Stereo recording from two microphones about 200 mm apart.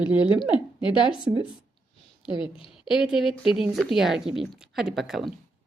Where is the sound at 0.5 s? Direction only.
25° left (ahead or behind).